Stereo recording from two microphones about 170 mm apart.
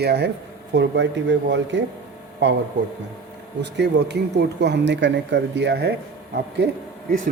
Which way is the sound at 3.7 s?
90° right.